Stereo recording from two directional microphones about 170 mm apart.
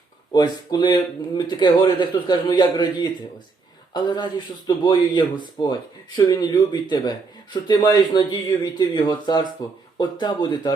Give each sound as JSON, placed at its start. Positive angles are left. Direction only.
{"t": 0.3, "sound": "speech", "side_deg": 25}